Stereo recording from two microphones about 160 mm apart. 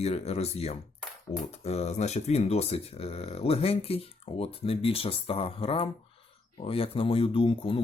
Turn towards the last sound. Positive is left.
turn(degrees=35)  # may be behind; listen again after turning